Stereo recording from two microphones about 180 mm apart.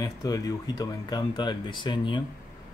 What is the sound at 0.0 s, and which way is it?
Speech, 20° left (ahead or behind).